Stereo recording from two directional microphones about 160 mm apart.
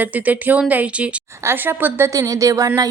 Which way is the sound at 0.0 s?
10° right (ahead or behind).